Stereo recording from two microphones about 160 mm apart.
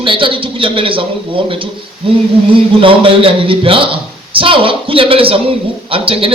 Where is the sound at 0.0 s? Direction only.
30° right (ahead or behind).